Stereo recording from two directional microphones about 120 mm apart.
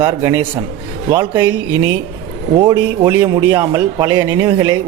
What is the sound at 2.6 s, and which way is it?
A man's voice, 40° right (ahead or behind).